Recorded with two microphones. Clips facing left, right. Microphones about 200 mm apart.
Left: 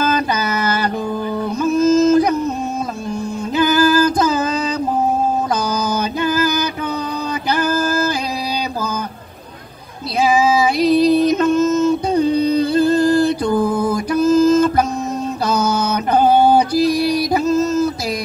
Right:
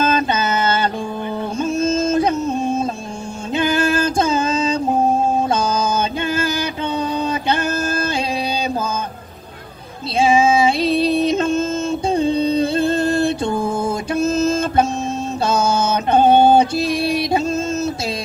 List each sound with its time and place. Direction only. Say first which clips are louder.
0.0 s mantra: even; 25° right (ahead or behind)
1.6 s yodeling: left 6 dB; 25° right (ahead or behind)
3.5 s female singing: left 3 dB; 25° right (ahead or behind)
5.5 s mantra: right 1 dB; 25° right (ahead or behind)
10.2 s music: right 1 dB; 25° right (ahead or behind)
15.4 s a sound: right 1 dB; 25° right (ahead or behind)